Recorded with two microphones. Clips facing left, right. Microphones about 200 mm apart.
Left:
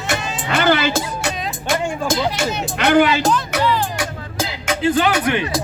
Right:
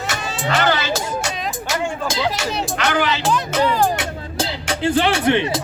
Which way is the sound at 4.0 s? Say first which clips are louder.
Even; 30° right (ahead or behind).